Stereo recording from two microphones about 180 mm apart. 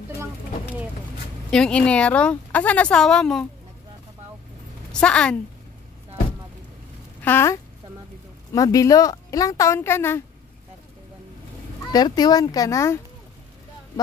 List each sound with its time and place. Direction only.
1.5 s a woman's voice: 5° left (ahead or behind)
5.0 s a woman's voice: 5° left (ahead or behind)
7.2 s a woman's voice: 10° left (ahead or behind)
11.9 s a woman's voice: 20° left (ahead or behind)